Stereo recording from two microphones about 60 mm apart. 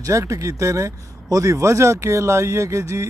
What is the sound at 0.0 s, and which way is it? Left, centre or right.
Speech, right.